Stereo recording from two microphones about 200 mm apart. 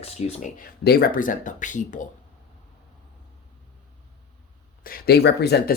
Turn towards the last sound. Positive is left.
turn(degrees=55)  # may be behind; listen again after turning